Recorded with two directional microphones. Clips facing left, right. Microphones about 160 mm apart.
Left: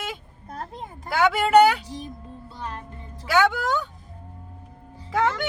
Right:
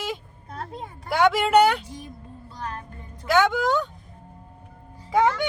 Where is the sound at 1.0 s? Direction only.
Centre (ahead or behind).